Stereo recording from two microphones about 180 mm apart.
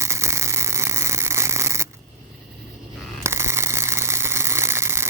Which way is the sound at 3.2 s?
15° right (ahead or behind).